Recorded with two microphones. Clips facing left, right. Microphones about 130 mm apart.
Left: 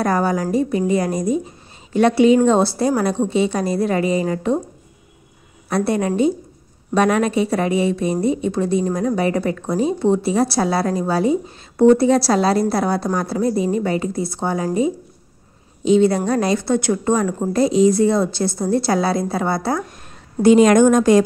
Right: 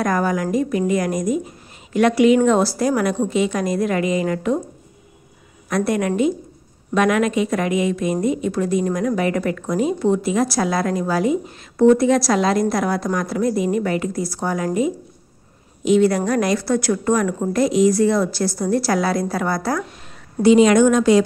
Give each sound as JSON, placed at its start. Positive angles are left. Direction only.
{"t": 0.0, "sound": "a woman's voice", "side_deg": 30}
{"t": 5.7, "sound": "a woman's voice", "side_deg": 30}
{"t": 20.4, "sound": "a woman's voice", "side_deg": 45}